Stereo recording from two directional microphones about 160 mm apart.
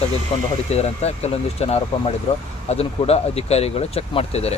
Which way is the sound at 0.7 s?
40° left (ahead or behind).